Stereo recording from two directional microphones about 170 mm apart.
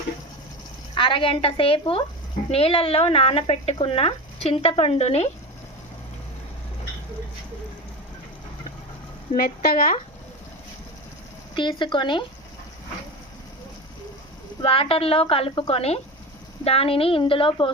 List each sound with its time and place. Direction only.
0.9 s speech: 30° left (ahead or behind)
9.3 s speech: 60° left (ahead or behind)
11.5 s speech: 30° left (ahead or behind)
14.6 s speech: 35° left (ahead or behind)